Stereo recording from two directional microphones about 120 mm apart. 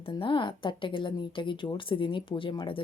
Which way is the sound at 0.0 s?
45° left (ahead or behind).